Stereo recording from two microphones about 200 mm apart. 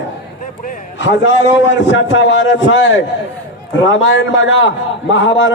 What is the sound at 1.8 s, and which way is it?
A man's voice, 65° left (ahead or behind).